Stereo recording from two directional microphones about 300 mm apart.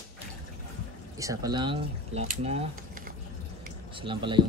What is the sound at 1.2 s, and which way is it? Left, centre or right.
Speech, centre.